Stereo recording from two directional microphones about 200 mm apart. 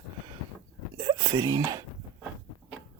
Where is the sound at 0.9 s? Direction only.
20° right (ahead or behind).